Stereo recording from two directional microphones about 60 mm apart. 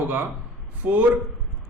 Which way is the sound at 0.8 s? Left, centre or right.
Centre.